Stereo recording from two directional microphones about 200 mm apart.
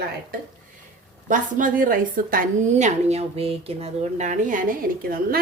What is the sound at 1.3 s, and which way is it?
A woman's voice, 40° right (ahead or behind).